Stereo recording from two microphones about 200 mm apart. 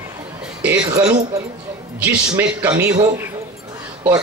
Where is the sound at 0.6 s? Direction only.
5° right (ahead or behind).